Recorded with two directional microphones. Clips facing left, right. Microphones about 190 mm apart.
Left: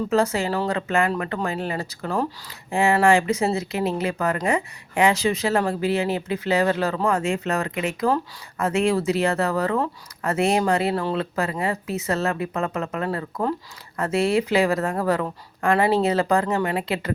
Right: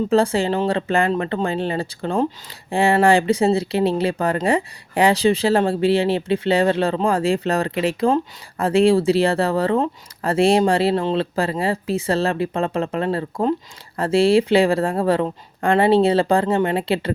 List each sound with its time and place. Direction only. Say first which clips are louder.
0.1 s a woman's voice: right 3 dB; 30° right (ahead or behind)